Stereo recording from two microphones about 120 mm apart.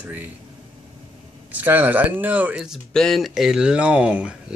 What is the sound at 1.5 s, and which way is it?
Speech, 15° right (ahead or behind).